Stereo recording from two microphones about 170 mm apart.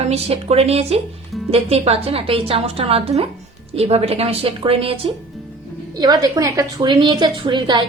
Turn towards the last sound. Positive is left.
turn(degrees=-25)  # may be behind; listen again after turning